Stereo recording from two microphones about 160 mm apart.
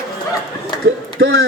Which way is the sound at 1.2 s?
85° right.